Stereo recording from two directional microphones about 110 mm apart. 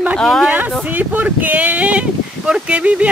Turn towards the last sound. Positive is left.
turn(degrees=-10)  # may be behind; listen again after turning